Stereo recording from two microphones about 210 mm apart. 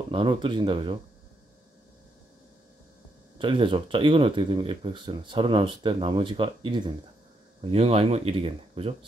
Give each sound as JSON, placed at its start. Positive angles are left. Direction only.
{"t": 0.1, "sound": "speech", "side_deg": -25}
{"t": 3.3, "sound": "speech", "side_deg": -25}